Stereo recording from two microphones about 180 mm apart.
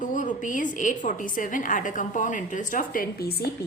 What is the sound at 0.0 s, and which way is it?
A woman's voice, 45° left (ahead or behind).